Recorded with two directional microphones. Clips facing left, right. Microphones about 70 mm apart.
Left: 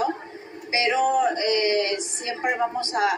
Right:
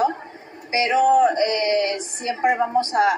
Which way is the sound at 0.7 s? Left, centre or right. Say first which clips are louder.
Right 5 dB; right.